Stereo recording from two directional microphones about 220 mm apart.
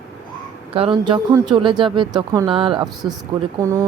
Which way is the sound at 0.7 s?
25° right (ahead or behind).